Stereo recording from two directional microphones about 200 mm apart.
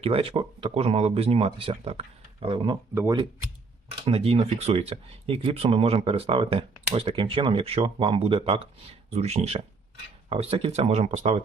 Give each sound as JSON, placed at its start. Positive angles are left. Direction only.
{"t": 0.0, "sound": "speech", "side_deg": -30}
{"t": 2.9, "sound": "speech", "side_deg": -15}
{"t": 4.0, "sound": "speech", "side_deg": -30}